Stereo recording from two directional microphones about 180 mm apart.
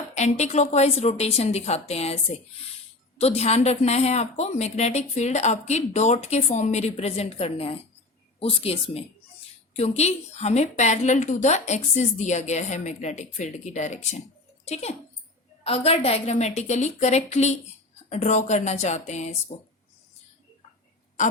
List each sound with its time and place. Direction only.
0.1 s a woman's voice: 40° left (ahead or behind)
3.2 s a woman's voice: 35° left (ahead or behind)